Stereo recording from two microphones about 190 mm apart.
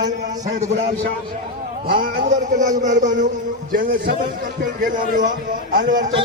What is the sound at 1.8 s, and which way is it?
A man's voice, 50° right (ahead or behind).